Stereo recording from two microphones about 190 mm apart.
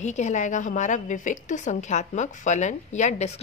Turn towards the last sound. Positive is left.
turn(degrees=35)  # may be behind; listen again after turning